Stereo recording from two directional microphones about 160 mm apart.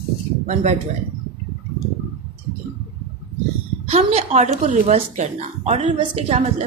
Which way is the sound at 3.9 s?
40° right (ahead or behind).